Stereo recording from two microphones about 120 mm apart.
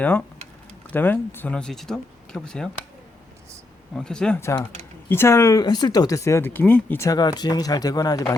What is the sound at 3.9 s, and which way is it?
Speech, 5° left (ahead or behind).